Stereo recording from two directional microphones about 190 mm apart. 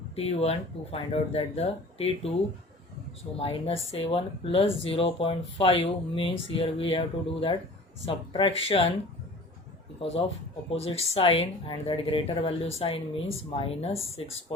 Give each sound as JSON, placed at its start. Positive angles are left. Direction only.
{"t": 0.2, "sound": "speech", "side_deg": 30}
{"t": 3.3, "sound": "speech", "side_deg": 30}
{"t": 10.0, "sound": "speech", "side_deg": 30}